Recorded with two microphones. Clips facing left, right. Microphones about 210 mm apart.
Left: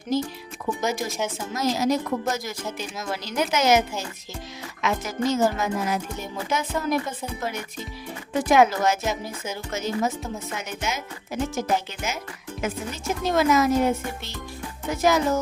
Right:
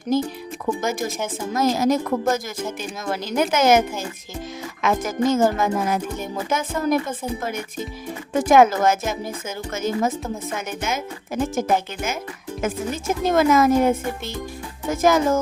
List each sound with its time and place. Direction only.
0.6 s speech: 50° right (ahead or behind)
12.6 s speech: 50° right (ahead or behind)